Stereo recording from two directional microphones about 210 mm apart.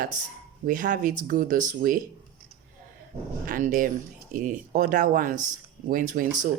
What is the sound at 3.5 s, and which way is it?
Speech, 40° right (ahead or behind).